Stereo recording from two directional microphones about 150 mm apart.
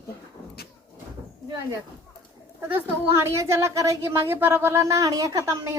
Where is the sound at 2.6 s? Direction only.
20° right (ahead or behind).